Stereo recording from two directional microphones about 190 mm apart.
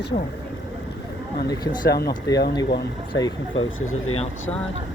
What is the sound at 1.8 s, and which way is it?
Speech, 55° left (ahead or behind).